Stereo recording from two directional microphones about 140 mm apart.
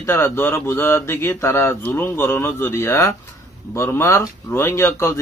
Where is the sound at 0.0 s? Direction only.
15° left (ahead or behind).